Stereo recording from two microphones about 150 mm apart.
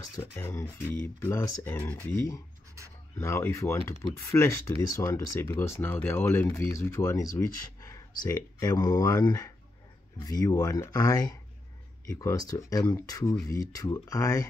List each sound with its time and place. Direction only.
0.2 s speech: 15° left (ahead or behind)